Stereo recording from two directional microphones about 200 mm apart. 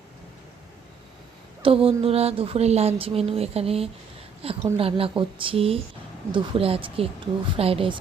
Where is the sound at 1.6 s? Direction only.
30° right (ahead or behind).